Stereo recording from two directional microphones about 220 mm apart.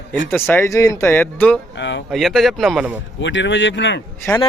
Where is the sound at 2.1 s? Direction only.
Centre (ahead or behind).